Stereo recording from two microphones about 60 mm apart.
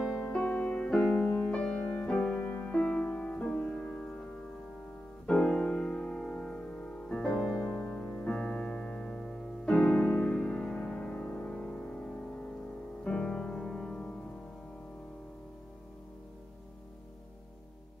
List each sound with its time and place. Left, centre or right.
0.2 s music: left
7.6 s piano: centre
9.8 s music: left